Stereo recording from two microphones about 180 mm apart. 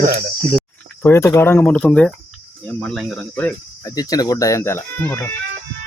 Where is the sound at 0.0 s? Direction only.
55° right (ahead or behind).